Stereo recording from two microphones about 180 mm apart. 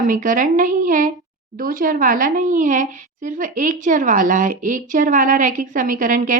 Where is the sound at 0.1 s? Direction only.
45° right (ahead or behind).